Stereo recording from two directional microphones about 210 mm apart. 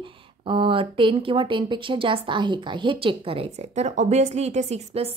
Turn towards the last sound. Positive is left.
turn(degrees=-30)  # may be behind; listen again after turning